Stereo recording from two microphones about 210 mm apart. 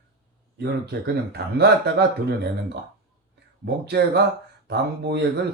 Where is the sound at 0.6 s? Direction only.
50° right (ahead or behind).